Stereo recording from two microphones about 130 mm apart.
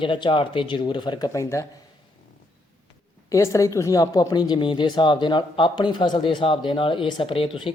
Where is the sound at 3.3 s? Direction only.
25° left (ahead or behind).